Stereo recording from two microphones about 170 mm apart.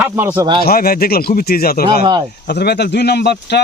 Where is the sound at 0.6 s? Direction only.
60° left (ahead or behind).